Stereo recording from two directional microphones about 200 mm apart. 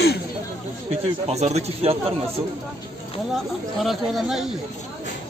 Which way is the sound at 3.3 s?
Centre (ahead or behind).